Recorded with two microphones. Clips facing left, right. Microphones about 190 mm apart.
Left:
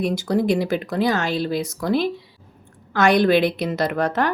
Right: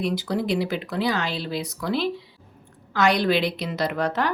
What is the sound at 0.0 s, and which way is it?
A woman's voice, 45° left (ahead or behind).